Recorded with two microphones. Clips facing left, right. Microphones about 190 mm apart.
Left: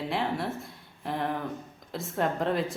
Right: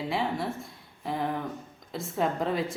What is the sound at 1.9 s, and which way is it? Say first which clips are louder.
Speech: even; centre (ahead or behind).